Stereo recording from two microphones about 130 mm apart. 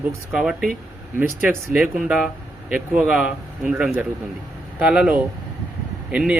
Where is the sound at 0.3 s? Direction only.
Centre (ahead or behind).